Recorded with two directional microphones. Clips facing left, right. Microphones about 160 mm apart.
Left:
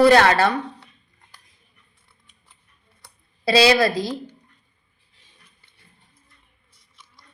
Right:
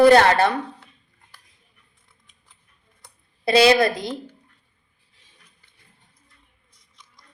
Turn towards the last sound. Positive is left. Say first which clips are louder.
# left 1 dB
turn(degrees=5)  # may be behind; listen again after turning